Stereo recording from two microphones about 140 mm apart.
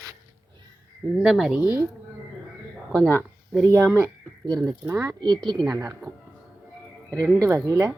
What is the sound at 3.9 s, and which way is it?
Speech, 25° right (ahead or behind).